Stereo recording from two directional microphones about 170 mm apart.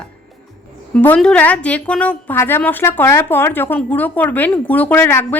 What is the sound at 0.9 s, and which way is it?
A woman's voice, 10° left (ahead or behind).